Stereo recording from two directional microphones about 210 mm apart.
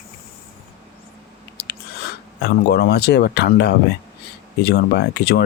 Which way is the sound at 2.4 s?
50° left (ahead or behind).